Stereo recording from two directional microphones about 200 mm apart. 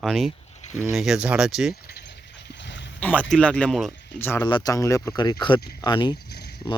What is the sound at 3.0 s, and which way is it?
Speech, 10° left (ahead or behind).